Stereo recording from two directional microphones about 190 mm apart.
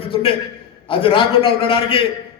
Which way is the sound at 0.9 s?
30° left (ahead or behind).